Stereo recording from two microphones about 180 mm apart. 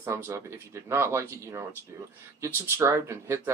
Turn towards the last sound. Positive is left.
turn(degrees=-15)  # may be behind; listen again after turning